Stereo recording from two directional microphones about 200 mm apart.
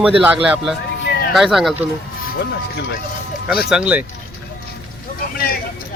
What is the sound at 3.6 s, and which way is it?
Speech, 5° right (ahead or behind).